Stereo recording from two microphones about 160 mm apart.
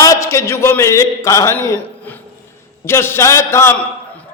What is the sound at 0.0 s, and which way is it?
A man's voice, 20° left (ahead or behind).